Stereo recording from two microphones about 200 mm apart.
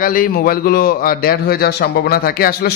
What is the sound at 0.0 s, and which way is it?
A man's voice, 45° left (ahead or behind).